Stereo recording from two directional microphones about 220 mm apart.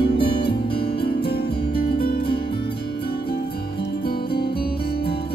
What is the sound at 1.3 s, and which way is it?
Music, 45° left (ahead or behind).